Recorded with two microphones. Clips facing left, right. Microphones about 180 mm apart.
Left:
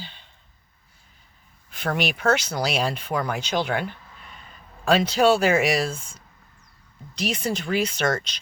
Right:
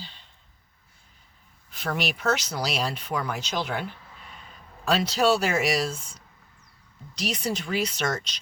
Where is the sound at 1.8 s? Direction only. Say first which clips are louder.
Left 4 dB; 60° left (ahead or behind).